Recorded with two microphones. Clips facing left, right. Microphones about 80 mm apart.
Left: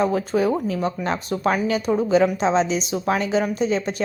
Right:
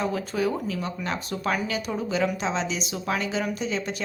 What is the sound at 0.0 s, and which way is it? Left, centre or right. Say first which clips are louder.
Speech: left 6 dB; left.